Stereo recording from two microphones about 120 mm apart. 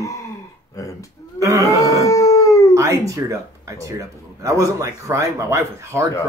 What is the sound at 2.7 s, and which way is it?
Speech, 25° right (ahead or behind).